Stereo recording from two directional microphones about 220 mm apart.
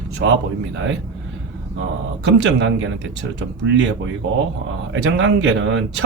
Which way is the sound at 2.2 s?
55° right (ahead or behind).